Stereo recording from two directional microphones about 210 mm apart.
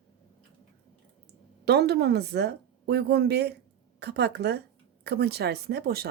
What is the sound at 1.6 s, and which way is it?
Speech, 50° right (ahead or behind).